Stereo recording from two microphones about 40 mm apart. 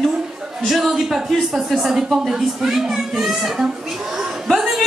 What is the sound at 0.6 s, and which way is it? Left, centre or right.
Speech, centre.